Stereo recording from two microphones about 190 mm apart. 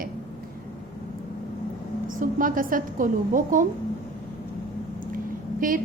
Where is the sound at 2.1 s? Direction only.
45° right (ahead or behind).